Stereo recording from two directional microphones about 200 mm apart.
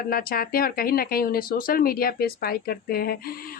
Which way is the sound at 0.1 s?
45° left (ahead or behind).